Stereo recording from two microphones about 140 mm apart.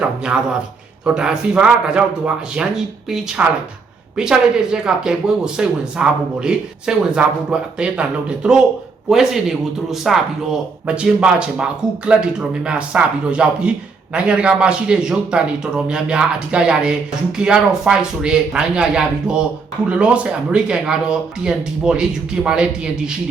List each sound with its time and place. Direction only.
0.0 s speech: 5° right (ahead or behind)
9.0 s speech: centre (ahead or behind)